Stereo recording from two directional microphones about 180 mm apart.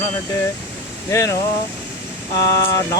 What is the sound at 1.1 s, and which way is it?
Speech, 15° left (ahead or behind).